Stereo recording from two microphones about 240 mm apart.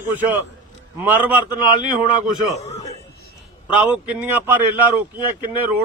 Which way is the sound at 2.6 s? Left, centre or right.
Left.